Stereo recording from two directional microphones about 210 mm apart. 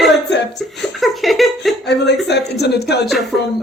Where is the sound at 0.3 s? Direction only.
55° left (ahead or behind).